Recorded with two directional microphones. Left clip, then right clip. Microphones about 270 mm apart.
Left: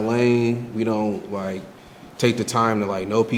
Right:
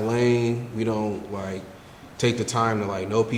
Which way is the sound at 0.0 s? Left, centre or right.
Left.